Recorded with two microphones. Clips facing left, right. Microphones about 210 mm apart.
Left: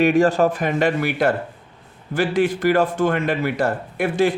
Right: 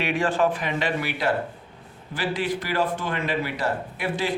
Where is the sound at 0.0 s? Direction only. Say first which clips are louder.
Left 7 dB; 45° left (ahead or behind).